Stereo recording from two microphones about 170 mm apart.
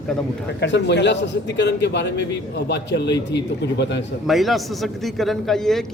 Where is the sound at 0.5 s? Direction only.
85° left.